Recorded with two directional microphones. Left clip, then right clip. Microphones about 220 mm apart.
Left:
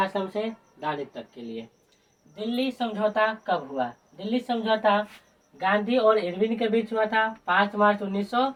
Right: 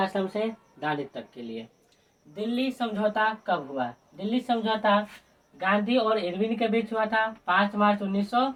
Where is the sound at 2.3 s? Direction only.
20° right (ahead or behind).